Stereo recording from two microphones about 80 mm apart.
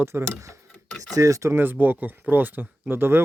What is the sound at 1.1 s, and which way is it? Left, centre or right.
Speech, right.